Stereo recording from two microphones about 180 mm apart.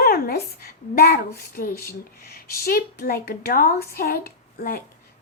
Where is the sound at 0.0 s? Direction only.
55° left (ahead or behind).